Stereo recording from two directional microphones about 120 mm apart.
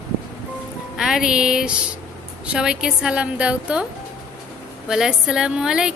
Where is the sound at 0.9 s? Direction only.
5° right (ahead or behind).